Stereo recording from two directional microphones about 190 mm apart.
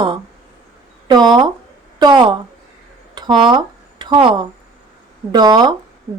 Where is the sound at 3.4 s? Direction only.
25° right (ahead or behind).